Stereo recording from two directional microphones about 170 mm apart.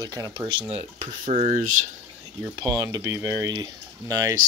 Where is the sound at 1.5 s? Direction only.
50° right (ahead or behind).